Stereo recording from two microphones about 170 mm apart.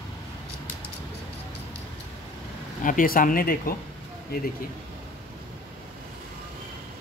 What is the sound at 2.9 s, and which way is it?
Speech, 55° left (ahead or behind).